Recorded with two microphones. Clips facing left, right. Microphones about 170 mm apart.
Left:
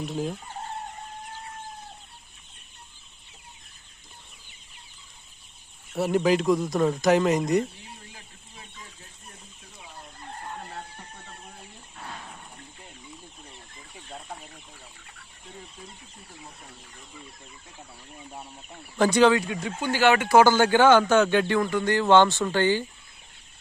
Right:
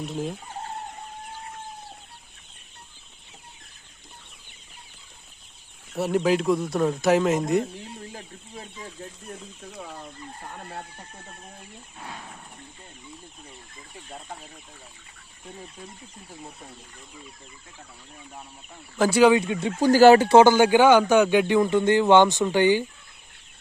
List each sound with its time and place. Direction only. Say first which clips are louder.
0.0 s speech: even; centre (ahead or behind)
5.9 s speech: even; centre (ahead or behind)
9.7 s chicken: right 8 dB; 75° right (ahead or behind)
18.9 s speech: right 1 dB; 5° right (ahead or behind)
19.3 s speech: right 4 dB; 20° right (ahead or behind)
19.9 s speech: right 7 dB; 40° right (ahead or behind); by 22.8 s 15° right (ahead or behind)